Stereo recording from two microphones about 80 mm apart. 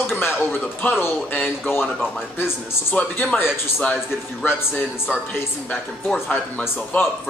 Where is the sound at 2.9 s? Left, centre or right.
Centre.